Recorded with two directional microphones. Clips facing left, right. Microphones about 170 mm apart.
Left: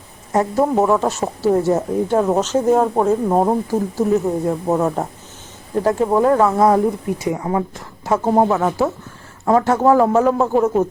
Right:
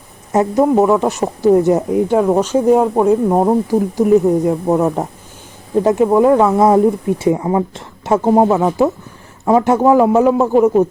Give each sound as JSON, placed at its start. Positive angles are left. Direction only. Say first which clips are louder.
{"t": 0.6, "sound": "speech", "louder": "right 4 dB", "side_deg": 0}
{"t": 0.9, "sound": "speech", "louder": "right 3 dB", "side_deg": -15}
{"t": 8.3, "sound": "speech", "louder": "right 4 dB", "side_deg": -15}